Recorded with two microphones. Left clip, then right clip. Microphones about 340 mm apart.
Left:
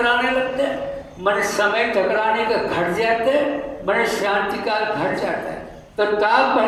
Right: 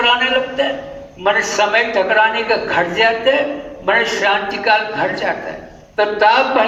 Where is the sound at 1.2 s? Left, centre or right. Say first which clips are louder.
Right 4 dB; right.